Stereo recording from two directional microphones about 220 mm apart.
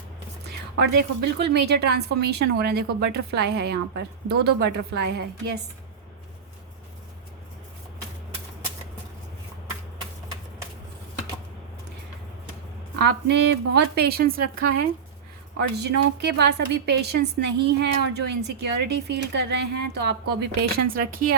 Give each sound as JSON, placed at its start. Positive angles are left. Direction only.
{"t": 0.4, "sound": "a woman's voice", "side_deg": -50}
{"t": 13.1, "sound": "a woman's voice", "side_deg": -50}